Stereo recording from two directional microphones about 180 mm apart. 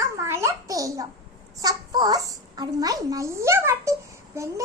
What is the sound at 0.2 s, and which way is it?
A child's voice, 15° right (ahead or behind).